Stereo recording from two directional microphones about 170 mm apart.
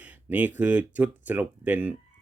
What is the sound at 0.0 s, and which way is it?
Speech, 10° right (ahead or behind).